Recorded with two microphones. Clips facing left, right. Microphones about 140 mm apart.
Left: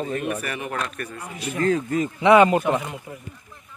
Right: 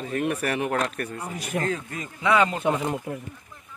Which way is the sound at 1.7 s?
25° left (ahead or behind).